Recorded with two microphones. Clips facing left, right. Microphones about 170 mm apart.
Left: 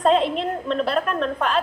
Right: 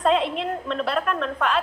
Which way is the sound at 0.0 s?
35° left (ahead or behind).